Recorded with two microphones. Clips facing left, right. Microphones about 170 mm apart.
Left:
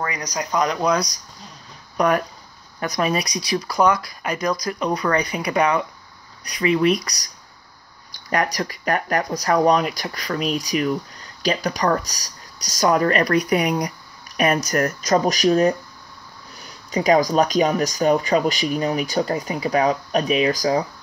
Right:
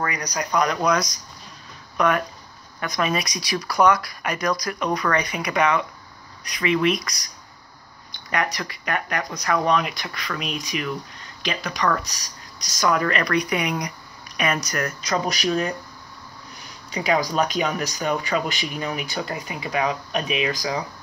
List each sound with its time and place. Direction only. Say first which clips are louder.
0.0 s speech: even; 25° left (ahead or behind)
2.0 s speech: left 2 dB; 40° left (ahead or behind)
16.9 s speech: left 5 dB; 40° left (ahead or behind)